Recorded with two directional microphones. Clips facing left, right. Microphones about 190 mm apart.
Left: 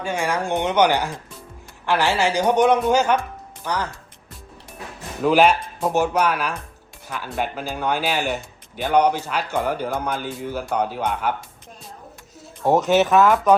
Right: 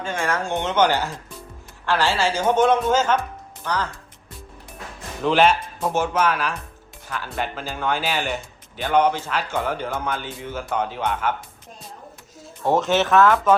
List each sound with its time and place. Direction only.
0.0 s speech: 15° left (ahead or behind)
5.2 s a man's voice: 5° left (ahead or behind)
12.6 s speech: 15° left (ahead or behind)